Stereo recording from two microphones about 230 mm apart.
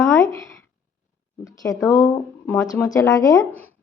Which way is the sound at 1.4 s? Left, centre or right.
Centre.